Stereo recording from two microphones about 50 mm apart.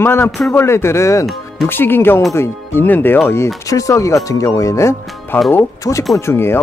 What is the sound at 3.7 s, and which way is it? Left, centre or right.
Speech, left.